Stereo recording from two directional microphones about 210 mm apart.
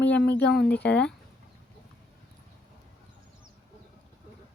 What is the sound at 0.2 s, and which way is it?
Speech, 55° left (ahead or behind).